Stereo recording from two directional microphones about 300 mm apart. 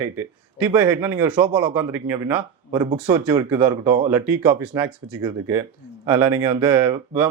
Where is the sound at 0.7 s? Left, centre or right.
Centre.